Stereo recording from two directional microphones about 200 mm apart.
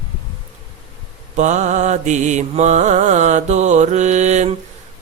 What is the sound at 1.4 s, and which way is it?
Mantra, 35° right (ahead or behind).